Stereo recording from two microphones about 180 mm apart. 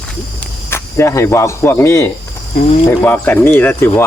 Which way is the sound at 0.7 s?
15° left (ahead or behind).